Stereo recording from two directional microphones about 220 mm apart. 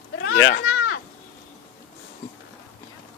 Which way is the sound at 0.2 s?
55° left (ahead or behind).